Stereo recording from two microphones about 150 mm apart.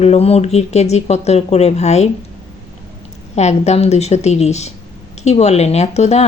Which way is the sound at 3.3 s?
50° left (ahead or behind).